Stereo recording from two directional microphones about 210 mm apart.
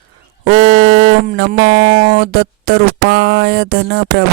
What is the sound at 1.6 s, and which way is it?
Music, 25° right (ahead or behind).